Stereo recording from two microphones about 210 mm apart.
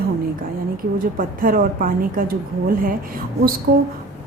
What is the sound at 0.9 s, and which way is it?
A woman's voice, 40° right (ahead or behind).